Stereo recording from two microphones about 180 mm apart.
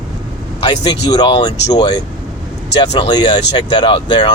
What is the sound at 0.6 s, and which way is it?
A man's voice, 25° left (ahead or behind).